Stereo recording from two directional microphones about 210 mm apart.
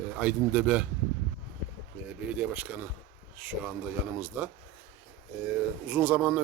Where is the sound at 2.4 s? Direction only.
10° right (ahead or behind).